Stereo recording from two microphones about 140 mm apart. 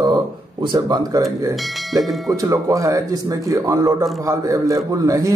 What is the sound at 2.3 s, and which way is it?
Speech, 25° right (ahead or behind).